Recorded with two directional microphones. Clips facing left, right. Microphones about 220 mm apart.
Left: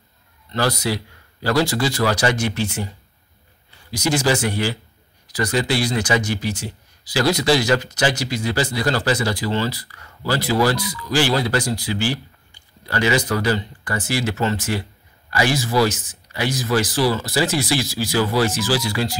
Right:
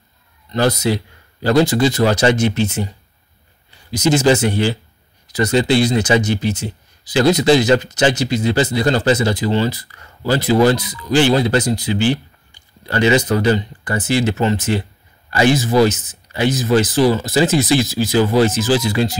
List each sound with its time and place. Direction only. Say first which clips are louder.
0.5 s speech: right 5 dB; 20° right (ahead or behind)
3.9 s speech: right 6 dB; 20° right (ahead or behind)